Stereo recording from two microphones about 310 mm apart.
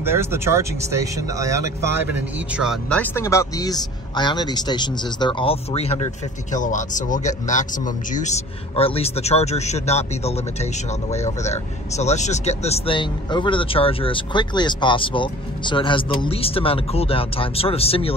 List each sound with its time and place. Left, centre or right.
0.0 s a man's voice: centre